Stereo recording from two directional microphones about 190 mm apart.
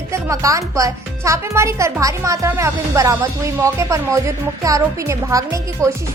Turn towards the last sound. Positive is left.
turn(degrees=-15)  # may be behind; listen again after turning